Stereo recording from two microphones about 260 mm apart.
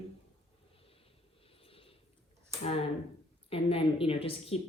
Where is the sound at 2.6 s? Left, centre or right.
Left.